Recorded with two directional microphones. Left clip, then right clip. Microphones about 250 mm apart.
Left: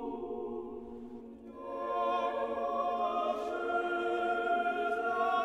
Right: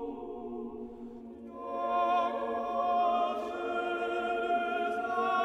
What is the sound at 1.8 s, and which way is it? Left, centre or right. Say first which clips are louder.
Music: right 4 dB; right.